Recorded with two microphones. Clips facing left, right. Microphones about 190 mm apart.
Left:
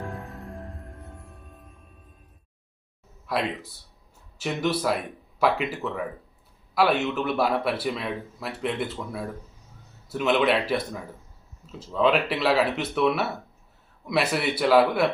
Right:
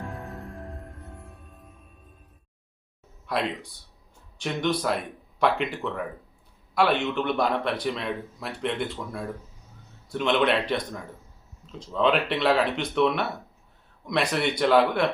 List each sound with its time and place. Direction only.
0.0 s music: centre (ahead or behind)
3.2 s a man's voice: centre (ahead or behind)